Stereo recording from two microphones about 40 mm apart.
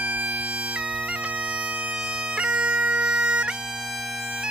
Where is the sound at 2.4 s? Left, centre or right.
Right.